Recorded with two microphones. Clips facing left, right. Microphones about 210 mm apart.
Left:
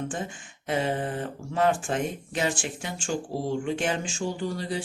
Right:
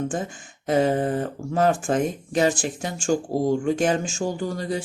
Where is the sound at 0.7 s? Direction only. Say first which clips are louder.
Right 7 dB; 40° right (ahead or behind).